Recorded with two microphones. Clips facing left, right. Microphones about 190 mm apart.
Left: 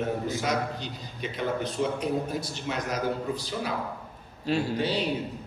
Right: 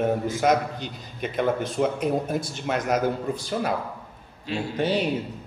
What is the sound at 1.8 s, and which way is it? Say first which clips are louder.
A man's voice: right 4 dB; 55° right (ahead or behind).